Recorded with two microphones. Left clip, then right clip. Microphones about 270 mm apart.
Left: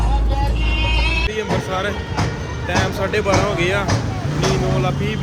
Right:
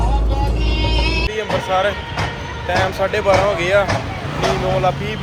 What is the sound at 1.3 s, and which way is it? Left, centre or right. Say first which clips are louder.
Speech: right 4 dB; centre.